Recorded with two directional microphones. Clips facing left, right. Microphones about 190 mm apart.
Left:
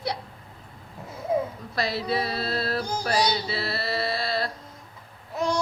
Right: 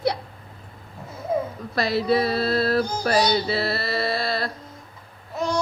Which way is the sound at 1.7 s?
50° right (ahead or behind).